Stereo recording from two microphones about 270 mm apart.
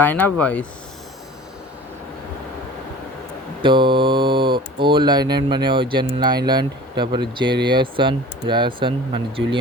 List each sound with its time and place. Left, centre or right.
0.0 s speech: centre
3.6 s speech: centre